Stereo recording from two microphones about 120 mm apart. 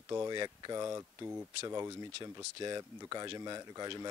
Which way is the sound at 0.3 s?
35° right (ahead or behind).